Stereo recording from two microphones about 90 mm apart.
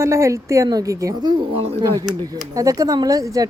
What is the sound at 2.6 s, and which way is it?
Speech, 40° right (ahead or behind).